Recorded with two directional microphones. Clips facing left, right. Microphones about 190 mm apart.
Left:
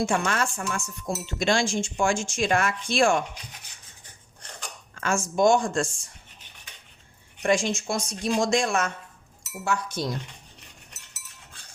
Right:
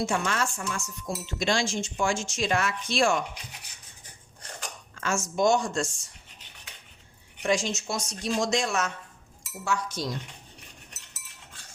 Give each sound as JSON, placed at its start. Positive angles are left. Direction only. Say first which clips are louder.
{"t": 0.0, "sound": "speech", "louder": "left 3 dB", "side_deg": 55}
{"t": 4.9, "sound": "speech", "louder": "left 3 dB", "side_deg": 55}
{"t": 7.4, "sound": "speech", "louder": "left 3 dB", "side_deg": 55}